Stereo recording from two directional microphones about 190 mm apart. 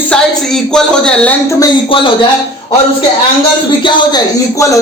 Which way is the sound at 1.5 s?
20° left (ahead or behind).